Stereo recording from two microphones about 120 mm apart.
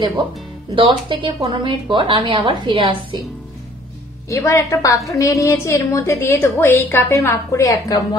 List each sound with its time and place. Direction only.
0.7 s a woman's voice: 45° right (ahead or behind)
4.3 s a woman's voice: 25° left (ahead or behind)